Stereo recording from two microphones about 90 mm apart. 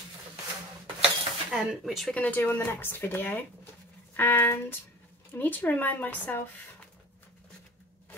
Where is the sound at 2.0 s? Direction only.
15° left (ahead or behind).